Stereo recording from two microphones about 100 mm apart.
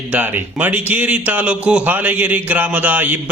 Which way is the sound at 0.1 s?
15° right (ahead or behind).